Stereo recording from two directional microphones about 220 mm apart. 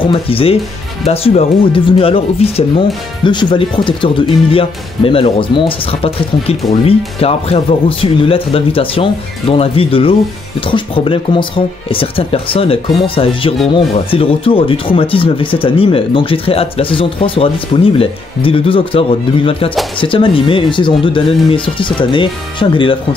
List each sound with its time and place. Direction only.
0.0 s speech: 25° left (ahead or behind)